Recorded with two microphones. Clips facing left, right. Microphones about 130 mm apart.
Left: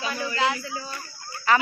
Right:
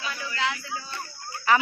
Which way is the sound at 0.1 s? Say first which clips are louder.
Left 4 dB; 40° left (ahead or behind).